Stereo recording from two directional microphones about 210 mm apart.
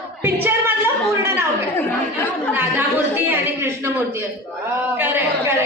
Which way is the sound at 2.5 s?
10° right (ahead or behind).